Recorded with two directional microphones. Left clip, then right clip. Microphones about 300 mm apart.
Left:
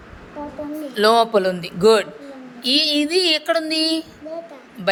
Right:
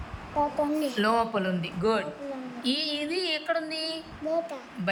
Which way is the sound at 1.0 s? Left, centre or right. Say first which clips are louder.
Left 13 dB; left.